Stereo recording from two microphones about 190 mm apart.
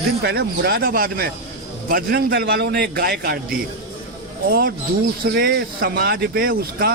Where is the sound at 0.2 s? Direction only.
60° right (ahead or behind).